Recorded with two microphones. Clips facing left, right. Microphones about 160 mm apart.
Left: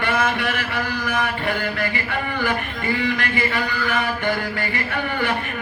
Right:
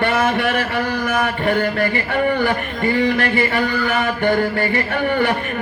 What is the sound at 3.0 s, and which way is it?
Music, 40° right (ahead or behind).